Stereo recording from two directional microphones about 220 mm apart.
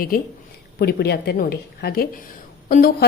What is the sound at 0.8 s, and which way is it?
A woman's voice, 45° left (ahead or behind).